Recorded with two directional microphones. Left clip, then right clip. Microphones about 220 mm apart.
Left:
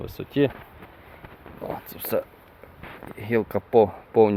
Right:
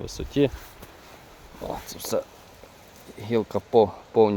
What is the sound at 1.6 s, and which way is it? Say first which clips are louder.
Speech: even; 5° right (ahead or behind).